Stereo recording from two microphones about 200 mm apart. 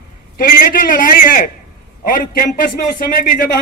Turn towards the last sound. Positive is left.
turn(degrees=45)  # may be behind; listen again after turning